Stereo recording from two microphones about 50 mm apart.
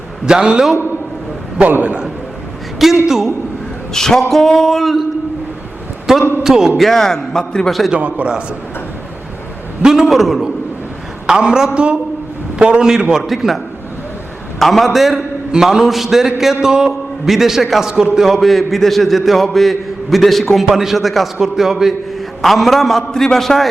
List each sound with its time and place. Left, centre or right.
0.3 s a man's voice: centre
1.8 s a man's voice: right
2.7 s a woman's voice: centre
3.9 s speech: centre
6.1 s a man's voice: centre
6.7 s speech: centre
7.9 s a man's voice: right
9.8 s a man's voice: centre
10.1 s a man's voice: centre; by 12.8 s right
13.0 s a man's voice: centre
14.6 s a man's voice: centre
18.0 s a man's voice: centre
18.3 s a man's voice: centre